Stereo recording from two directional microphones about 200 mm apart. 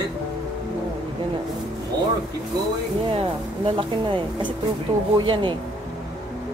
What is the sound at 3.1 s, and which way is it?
Speech, 30° right (ahead or behind).